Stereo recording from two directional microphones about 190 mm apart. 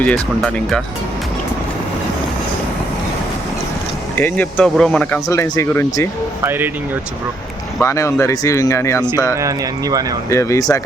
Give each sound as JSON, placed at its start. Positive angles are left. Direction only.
{"t": 0.0, "sound": "speech", "side_deg": 5}
{"t": 4.2, "sound": "speech", "side_deg": 5}
{"t": 6.4, "sound": "speech", "side_deg": -10}
{"t": 7.8, "sound": "speech", "side_deg": 15}
{"t": 9.3, "sound": "speech", "side_deg": -15}
{"t": 10.2, "sound": "speech", "side_deg": 15}